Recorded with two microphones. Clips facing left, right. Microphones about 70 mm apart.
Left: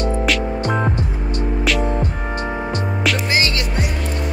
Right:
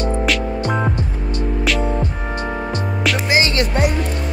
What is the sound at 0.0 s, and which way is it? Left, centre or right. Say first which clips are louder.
Music: even; centre.